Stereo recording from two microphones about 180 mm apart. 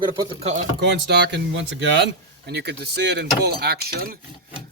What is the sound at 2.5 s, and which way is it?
Speech, 65° right (ahead or behind).